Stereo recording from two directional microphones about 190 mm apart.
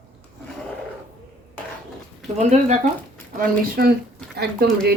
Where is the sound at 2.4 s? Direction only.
35° right (ahead or behind).